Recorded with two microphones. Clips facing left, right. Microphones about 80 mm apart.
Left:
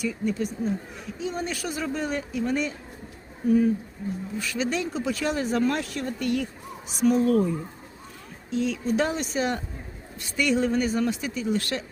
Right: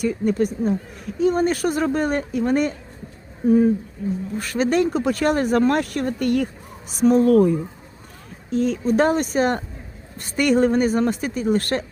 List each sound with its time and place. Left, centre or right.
0.0 s speech: right
3.4 s speech: right
4.4 s speech: right
6.9 s speech: right
7.2 s speech: right
8.4 s speech: right